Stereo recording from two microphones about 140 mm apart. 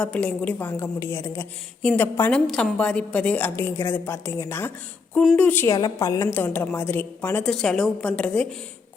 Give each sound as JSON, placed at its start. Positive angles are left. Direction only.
{"t": 0.0, "sound": "a woman's voice", "side_deg": 10}
{"t": 2.5, "sound": "a woman's voice", "side_deg": 5}
{"t": 5.1, "sound": "speech", "side_deg": 0}
{"t": 5.4, "sound": "a woman's voice", "side_deg": 10}
{"t": 5.6, "sound": "a woman's voice", "side_deg": 25}
{"t": 6.2, "sound": "a woman's voice", "side_deg": 10}